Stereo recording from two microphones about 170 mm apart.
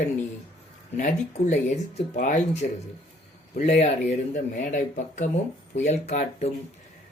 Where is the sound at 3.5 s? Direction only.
40° left (ahead or behind).